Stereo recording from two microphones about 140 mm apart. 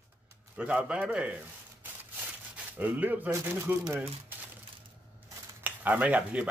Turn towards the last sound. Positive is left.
turn(degrees=-10)  # may be behind; listen again after turning